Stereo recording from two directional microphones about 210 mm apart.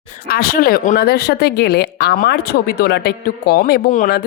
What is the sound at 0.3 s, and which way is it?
Speech, 45° left (ahead or behind).